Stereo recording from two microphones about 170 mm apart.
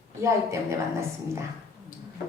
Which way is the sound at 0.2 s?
15° right (ahead or behind).